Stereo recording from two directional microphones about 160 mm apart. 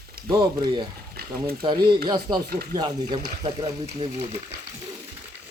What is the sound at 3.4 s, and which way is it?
Speech, 40° right (ahead or behind).